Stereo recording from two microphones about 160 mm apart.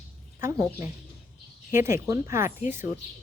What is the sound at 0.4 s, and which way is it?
Speech, 15° right (ahead or behind).